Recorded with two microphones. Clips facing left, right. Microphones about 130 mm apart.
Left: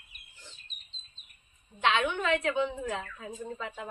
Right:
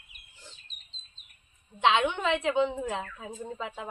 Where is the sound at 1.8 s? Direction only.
20° right (ahead or behind).